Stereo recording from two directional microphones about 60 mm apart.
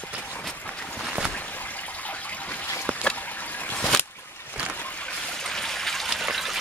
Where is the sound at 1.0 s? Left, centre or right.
Centre.